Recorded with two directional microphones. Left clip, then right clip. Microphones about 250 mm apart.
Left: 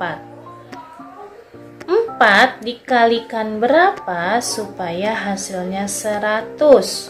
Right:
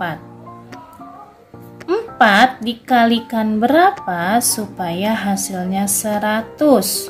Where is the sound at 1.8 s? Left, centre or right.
Right.